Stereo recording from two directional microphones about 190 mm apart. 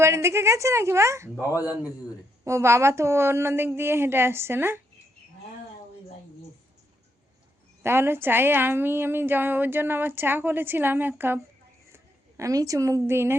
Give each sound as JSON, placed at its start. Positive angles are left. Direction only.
{"t": 0.0, "sound": "a woman's voice", "side_deg": -15}
{"t": 1.4, "sound": "a man's voice", "side_deg": 15}
{"t": 2.4, "sound": "a woman's voice", "side_deg": -15}
{"t": 7.8, "sound": "a woman's voice", "side_deg": -10}
{"t": 12.4, "sound": "a woman's voice", "side_deg": -15}